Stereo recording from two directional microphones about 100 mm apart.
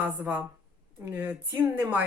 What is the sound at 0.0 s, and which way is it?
Speech, 15° right (ahead or behind).